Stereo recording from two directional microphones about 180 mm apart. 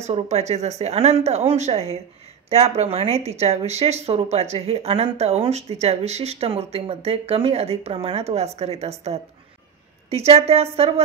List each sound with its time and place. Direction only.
0.0 s speech: 40° right (ahead or behind)
10.0 s speech: 35° right (ahead or behind)